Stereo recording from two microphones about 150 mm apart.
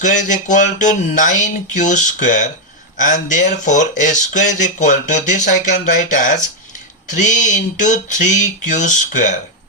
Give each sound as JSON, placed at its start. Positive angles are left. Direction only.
{"t": 0.0, "sound": "speech", "side_deg": 55}